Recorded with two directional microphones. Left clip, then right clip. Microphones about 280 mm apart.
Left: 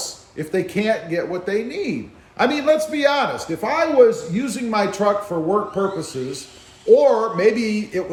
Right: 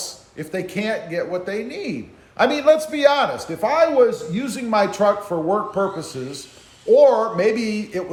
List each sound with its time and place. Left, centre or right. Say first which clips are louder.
0.0 s a man's voice: left 3 dB; centre